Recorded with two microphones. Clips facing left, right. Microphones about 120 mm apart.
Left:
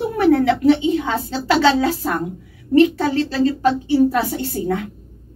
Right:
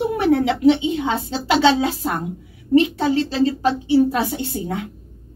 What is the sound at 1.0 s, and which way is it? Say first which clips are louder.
A woman's voice: even; 20° right (ahead or behind).